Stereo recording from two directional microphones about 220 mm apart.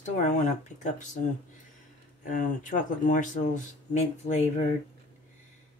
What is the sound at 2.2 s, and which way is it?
Speech, 35° left (ahead or behind).